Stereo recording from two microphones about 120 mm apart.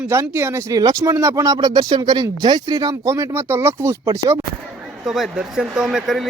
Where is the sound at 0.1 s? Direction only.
20° right (ahead or behind).